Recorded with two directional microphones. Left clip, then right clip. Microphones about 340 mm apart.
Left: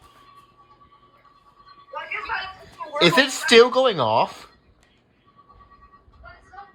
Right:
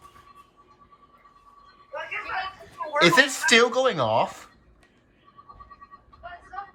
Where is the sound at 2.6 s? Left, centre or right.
Centre.